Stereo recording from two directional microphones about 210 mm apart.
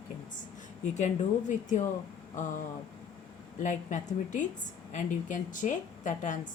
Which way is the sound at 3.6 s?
35° left (ahead or behind).